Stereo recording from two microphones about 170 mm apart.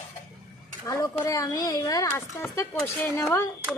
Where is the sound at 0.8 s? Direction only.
15° left (ahead or behind).